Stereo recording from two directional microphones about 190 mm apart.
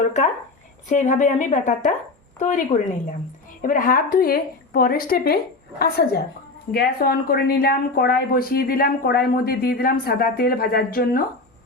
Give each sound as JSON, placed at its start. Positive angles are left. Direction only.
{"t": 0.9, "sound": "a woman's voice", "side_deg": 40}